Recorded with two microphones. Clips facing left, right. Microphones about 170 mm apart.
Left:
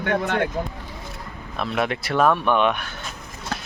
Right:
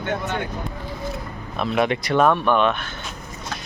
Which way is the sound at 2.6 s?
10° left (ahead or behind).